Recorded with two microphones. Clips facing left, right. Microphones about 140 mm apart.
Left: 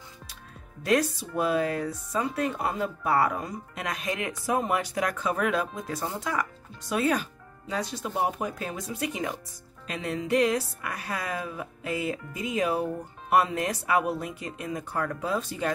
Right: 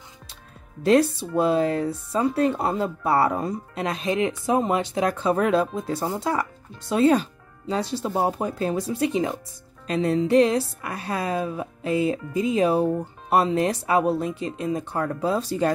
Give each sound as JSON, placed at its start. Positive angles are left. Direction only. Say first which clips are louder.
{"t": 0.8, "sound": "speech", "louder": "right 6 dB", "side_deg": -30}